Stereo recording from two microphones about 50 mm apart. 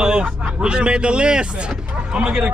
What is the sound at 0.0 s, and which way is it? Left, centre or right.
Speech, centre.